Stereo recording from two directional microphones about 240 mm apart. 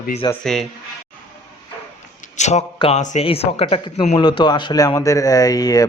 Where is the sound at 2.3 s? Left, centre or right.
Left.